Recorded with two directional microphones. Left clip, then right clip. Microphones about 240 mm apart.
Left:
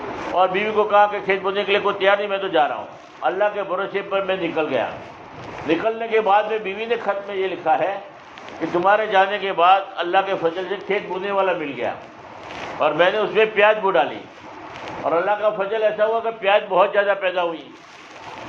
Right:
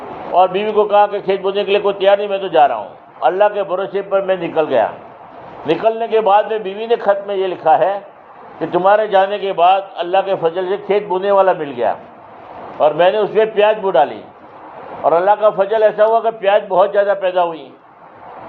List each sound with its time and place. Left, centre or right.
0.3 s a man's voice: right